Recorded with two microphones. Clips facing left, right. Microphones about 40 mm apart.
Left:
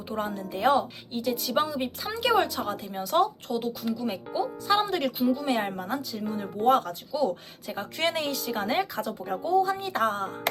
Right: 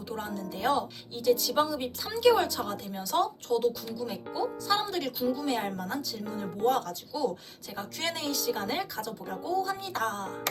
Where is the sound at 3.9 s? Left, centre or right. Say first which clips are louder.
Left 5 dB; left.